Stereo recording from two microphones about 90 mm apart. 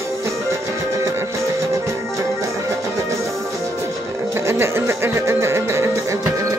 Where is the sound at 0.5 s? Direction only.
35° right (ahead or behind).